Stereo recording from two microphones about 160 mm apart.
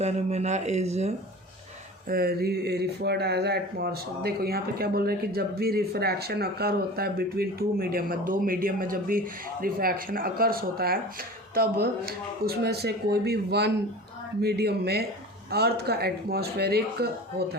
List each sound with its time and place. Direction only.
0.0 s speech: 45° right (ahead or behind)
2.0 s speech: 70° right (ahead or behind)